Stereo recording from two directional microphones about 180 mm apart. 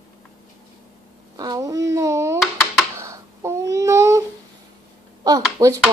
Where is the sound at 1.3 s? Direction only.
20° right (ahead or behind).